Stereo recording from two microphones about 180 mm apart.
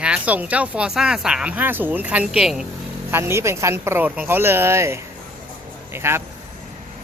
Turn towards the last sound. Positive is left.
turn(degrees=-15)  # may be behind; listen again after turning